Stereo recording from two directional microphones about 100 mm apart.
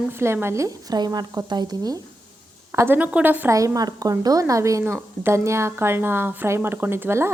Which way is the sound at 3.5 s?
30° right (ahead or behind).